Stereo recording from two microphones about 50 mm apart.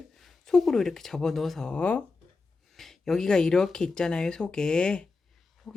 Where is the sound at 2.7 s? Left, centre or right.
Centre.